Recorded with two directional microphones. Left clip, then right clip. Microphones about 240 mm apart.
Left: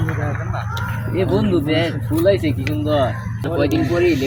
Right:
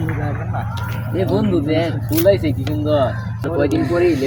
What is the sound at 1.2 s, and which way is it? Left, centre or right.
Speech, centre.